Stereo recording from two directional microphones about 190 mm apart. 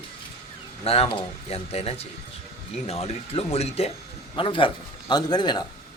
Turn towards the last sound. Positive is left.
turn(degrees=20)  # may be behind; listen again after turning